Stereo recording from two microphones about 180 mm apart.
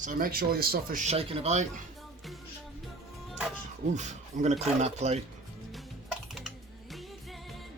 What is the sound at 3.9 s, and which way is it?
Speech, 40° right (ahead or behind).